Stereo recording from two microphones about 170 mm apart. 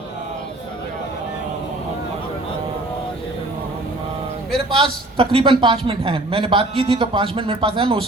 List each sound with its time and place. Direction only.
4.7 s a man's voice: 30° right (ahead or behind)